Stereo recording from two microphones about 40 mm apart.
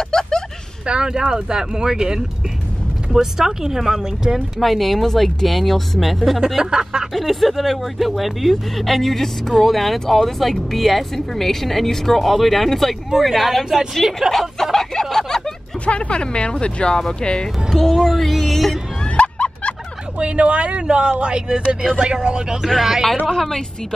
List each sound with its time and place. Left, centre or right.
0.1 s a sound: centre
0.8 s speech: right
4.6 s speech: centre
6.6 s speech: centre
7.2 s speech: centre
14.3 s a sound: centre
15.8 s speech: left
17.7 s a woman's voice: centre
18.0 s speech: centre
19.0 s a sound: left
20.2 s speech: right; by 23.0 s centre
23.2 s a woman's voice: centre